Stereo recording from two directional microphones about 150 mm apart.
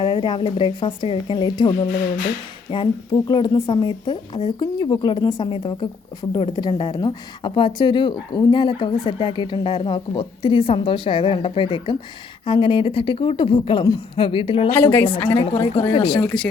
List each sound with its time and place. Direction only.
0.0 s a woman's voice: 30° left (ahead or behind)
14.7 s a woman's voice: 15° left (ahead or behind)
15.3 s a woman's voice: 35° left (ahead or behind)